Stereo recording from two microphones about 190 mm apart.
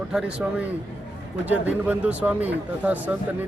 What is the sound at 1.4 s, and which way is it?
Speech, 10° right (ahead or behind).